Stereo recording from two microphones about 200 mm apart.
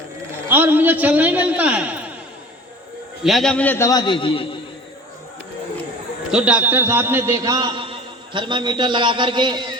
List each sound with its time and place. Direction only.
0.4 s a man's voice: 10° right (ahead or behind)
3.2 s a man's voice: centre (ahead or behind); by 4.4 s 25° left (ahead or behind)
6.3 s a man's voice: 5° right (ahead or behind); by 9.7 s 20° right (ahead or behind)